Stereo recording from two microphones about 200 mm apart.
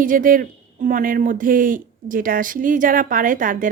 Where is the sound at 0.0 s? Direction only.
45° right (ahead or behind).